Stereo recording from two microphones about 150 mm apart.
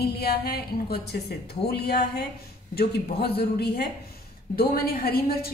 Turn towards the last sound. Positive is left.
turn(degrees=90)